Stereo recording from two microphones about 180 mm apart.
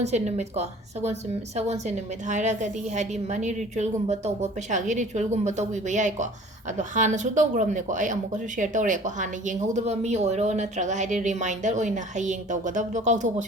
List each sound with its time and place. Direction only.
0.0 s a woman's voice: 40° right (ahead or behind)